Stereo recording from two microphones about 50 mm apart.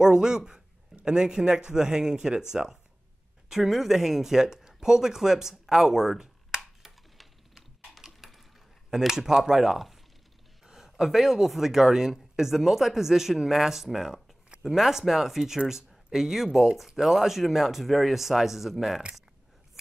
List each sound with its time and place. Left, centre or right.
0.0 s speech: centre
6.8 s coin: centre
8.9 s speech: centre